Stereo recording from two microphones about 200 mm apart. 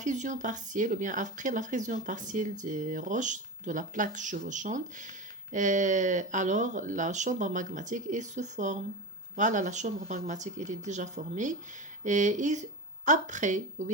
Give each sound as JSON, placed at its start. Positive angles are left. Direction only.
{"t": 0.0, "sound": "speech", "side_deg": -40}